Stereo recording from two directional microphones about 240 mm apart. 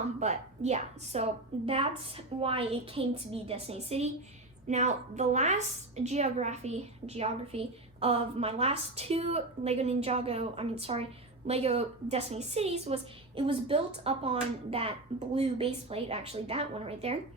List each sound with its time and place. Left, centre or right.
0.2 s a woman's voice: right